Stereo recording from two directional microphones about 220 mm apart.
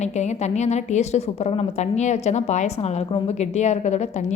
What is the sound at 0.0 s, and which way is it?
A woman's voice, 30° left (ahead or behind).